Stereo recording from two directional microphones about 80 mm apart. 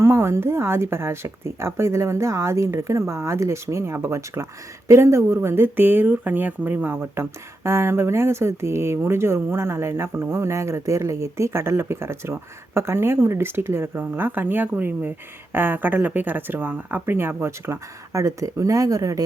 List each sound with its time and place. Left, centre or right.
0.0 s speech: right